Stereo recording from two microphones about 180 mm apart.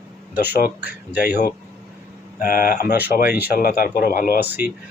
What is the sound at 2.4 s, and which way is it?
Speech, 50° left (ahead or behind).